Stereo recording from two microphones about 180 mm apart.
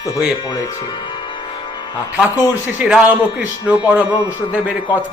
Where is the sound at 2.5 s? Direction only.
5° right (ahead or behind).